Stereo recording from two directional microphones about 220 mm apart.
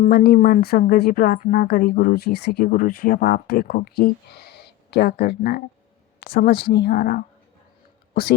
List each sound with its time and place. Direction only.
0.0 s speech: 40° left (ahead or behind)